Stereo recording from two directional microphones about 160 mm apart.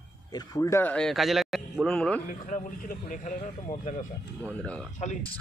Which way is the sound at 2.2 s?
55° left (ahead or behind).